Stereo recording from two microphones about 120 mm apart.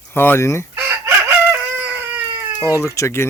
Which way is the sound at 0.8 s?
20° right (ahead or behind).